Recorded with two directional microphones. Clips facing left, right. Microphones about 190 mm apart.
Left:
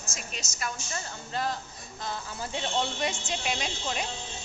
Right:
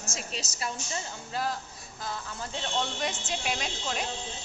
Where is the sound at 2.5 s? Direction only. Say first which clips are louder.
Left 2 dB; 10° left (ahead or behind).